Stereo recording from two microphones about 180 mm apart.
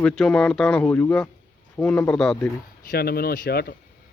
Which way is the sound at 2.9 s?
55° left (ahead or behind).